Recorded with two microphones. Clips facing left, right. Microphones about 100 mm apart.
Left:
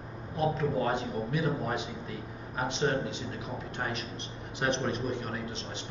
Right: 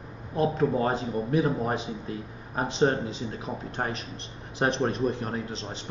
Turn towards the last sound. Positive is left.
turn(degrees=-35)  # may be behind; listen again after turning